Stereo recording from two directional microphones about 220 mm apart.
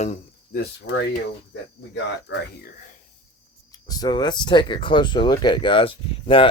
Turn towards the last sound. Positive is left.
turn(degrees=25)  # may be behind; listen again after turning